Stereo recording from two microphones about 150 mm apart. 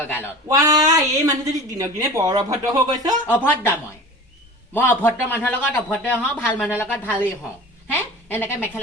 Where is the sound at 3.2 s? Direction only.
15° left (ahead or behind).